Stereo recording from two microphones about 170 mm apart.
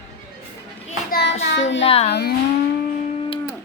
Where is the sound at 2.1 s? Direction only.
75° left (ahead or behind).